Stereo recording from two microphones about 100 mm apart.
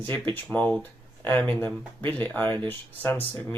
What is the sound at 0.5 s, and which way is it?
Speech, 15° left (ahead or behind).